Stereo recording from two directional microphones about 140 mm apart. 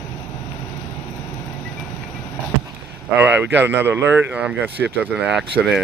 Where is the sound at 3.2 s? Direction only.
15° right (ahead or behind).